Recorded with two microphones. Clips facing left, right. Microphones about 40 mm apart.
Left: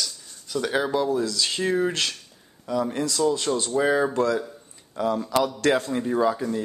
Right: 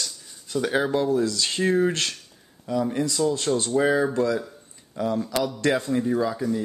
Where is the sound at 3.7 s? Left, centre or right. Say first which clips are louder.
Even; centre.